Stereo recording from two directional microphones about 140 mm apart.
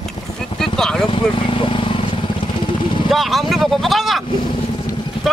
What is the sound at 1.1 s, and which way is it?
Vehicle, 35° left (ahead or behind).